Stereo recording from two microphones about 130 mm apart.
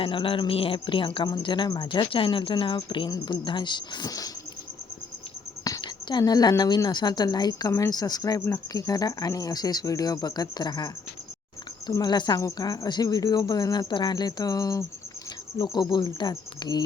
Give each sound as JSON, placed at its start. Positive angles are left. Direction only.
{"t": 0.0, "sound": "a woman's voice", "side_deg": 40}
{"t": 5.6, "sound": "a woman's voice", "side_deg": 30}